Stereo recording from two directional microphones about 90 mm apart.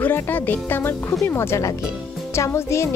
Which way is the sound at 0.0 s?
20° left (ahead or behind).